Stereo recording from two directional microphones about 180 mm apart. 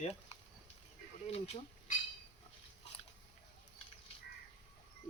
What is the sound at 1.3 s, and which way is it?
Speech, 35° left (ahead or behind).